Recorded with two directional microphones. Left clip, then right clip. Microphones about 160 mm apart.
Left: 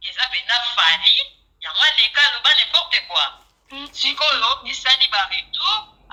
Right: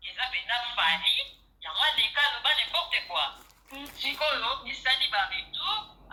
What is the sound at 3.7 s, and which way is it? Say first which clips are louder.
Telephone: left 11 dB; 40° left (ahead or behind).